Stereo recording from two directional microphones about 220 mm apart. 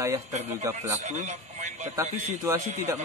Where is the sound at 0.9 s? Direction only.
30° right (ahead or behind).